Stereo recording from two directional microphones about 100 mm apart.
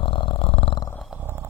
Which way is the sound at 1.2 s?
25° right (ahead or behind).